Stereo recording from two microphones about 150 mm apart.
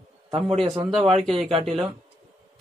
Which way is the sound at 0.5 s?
35° right (ahead or behind).